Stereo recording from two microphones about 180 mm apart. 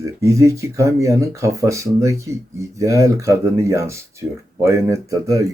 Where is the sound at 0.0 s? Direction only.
15° right (ahead or behind).